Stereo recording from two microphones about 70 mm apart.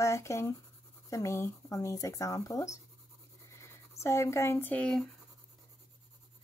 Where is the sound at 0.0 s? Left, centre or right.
Left.